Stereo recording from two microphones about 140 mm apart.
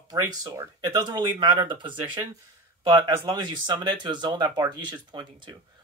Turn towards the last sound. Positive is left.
turn(degrees=-30)  # may be behind; listen again after turning